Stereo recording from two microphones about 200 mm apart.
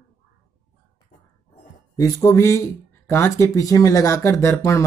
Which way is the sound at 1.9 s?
15° left (ahead or behind).